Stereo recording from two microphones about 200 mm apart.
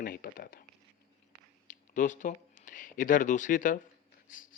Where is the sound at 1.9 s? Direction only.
40° left (ahead or behind).